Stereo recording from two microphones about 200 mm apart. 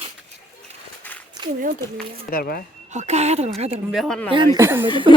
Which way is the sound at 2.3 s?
50° left (ahead or behind).